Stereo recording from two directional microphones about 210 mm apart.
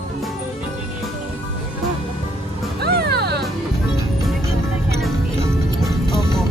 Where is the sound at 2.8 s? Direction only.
50° right (ahead or behind).